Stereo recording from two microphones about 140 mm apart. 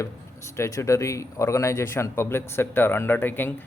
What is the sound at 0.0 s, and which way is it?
Speech, 20° left (ahead or behind).